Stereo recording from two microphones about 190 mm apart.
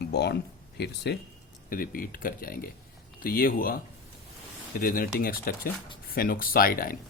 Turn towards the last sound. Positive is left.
turn(degrees=50)  # may be behind; listen again after turning